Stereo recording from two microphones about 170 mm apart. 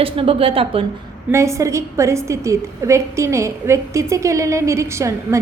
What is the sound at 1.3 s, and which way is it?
A woman's voice, 15° right (ahead or behind).